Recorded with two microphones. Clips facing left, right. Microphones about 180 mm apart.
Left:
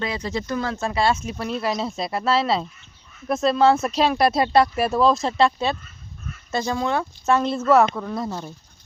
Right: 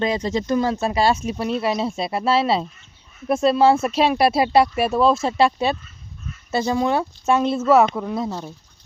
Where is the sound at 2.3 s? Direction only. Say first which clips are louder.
Right 2 dB; 10° right (ahead or behind).